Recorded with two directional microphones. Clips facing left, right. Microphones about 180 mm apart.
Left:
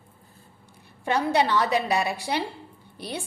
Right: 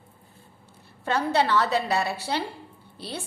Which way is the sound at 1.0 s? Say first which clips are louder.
Left 1 dB; 15° left (ahead or behind).